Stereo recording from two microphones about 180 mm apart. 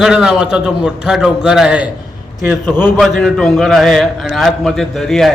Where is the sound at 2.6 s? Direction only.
10° left (ahead or behind).